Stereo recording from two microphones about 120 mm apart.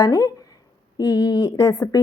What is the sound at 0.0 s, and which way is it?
A woman's voice, 30° left (ahead or behind).